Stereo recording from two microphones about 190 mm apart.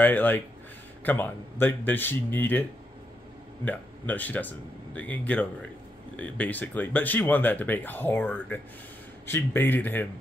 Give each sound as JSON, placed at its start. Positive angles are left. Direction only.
{"t": 0.0, "sound": "speech", "side_deg": 10}
{"t": 3.6, "sound": "speech", "side_deg": 10}